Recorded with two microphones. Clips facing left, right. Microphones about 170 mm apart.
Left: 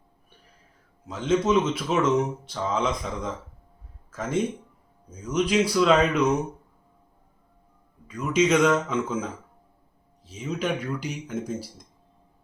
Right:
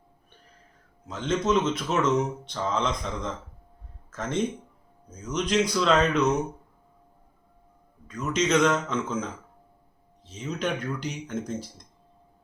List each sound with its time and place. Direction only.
1.0 s speech: 5° left (ahead or behind)
8.0 s speech: 10° left (ahead or behind)